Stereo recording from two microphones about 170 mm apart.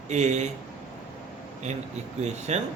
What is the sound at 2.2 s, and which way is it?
Speech, 40° right (ahead or behind).